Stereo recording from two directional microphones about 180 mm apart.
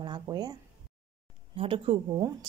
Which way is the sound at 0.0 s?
25° right (ahead or behind).